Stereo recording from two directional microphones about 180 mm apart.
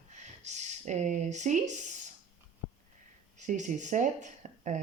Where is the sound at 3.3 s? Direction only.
45° right (ahead or behind).